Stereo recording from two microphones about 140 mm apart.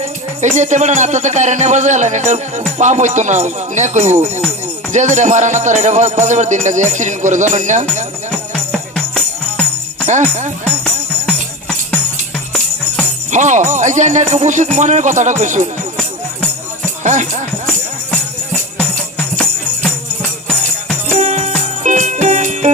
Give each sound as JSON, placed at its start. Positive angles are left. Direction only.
{"t": 0.0, "sound": "speech", "side_deg": -55}
{"t": 8.5, "sound": "music", "side_deg": 5}
{"t": 10.1, "sound": "speech", "side_deg": -60}
{"t": 11.3, "sound": "music", "side_deg": 5}
{"t": 13.3, "sound": "speech", "side_deg": -60}
{"t": 17.0, "sound": "speech", "side_deg": -60}
{"t": 17.7, "sound": "music", "side_deg": 5}
{"t": 21.1, "sound": "music", "side_deg": -55}